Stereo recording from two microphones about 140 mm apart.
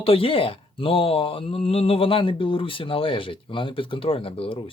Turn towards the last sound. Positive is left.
turn(degrees=40)  # may be behind; listen again after turning